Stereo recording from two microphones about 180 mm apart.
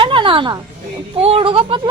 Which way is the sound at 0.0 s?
30° right (ahead or behind).